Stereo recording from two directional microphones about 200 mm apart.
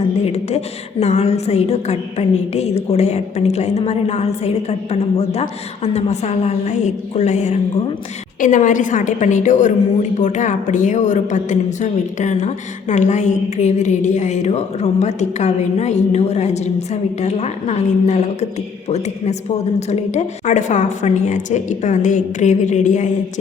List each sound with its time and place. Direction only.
0.3 s a woman's voice: 30° left (ahead or behind)